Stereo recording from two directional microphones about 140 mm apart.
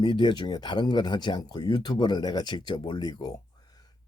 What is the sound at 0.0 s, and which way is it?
Speech, 35° left (ahead or behind).